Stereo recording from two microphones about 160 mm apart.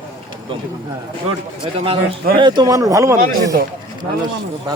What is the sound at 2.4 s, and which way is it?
Speech, 25° right (ahead or behind).